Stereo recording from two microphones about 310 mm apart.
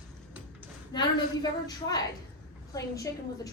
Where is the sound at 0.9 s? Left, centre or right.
Centre.